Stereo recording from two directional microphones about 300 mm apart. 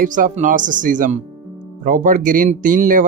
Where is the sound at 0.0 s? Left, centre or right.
Right.